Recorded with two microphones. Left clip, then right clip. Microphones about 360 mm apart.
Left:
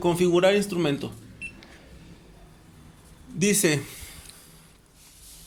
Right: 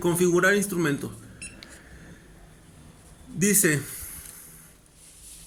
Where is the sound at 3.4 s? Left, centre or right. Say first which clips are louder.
Left 1 dB; centre.